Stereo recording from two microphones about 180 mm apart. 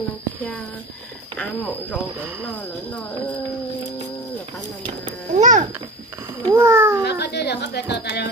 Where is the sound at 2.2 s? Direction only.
5° right (ahead or behind).